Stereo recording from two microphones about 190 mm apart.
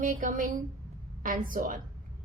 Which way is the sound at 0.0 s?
45° right (ahead or behind).